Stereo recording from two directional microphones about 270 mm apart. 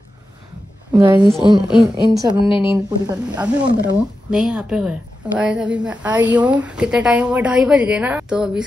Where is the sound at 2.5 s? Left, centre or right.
Centre.